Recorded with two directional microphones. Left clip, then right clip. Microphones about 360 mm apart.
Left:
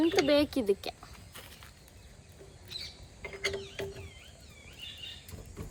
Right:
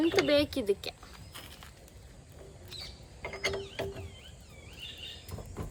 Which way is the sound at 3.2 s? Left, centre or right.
Centre.